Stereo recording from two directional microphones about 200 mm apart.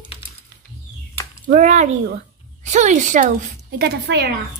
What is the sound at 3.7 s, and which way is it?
Speech, 55° right (ahead or behind).